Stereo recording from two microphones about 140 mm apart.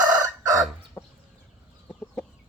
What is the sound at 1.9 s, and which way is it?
Chicken, 5° left (ahead or behind).